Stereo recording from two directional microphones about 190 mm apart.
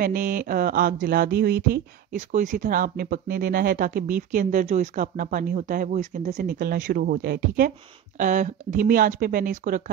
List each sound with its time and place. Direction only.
0.0 s speech: 45° right (ahead or behind)
2.1 s speech: 40° right (ahead or behind)